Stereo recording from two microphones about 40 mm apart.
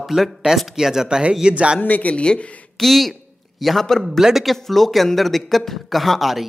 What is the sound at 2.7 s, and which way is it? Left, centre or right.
A man's voice, centre.